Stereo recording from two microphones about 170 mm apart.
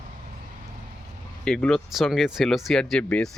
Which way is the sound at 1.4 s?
5° left (ahead or behind).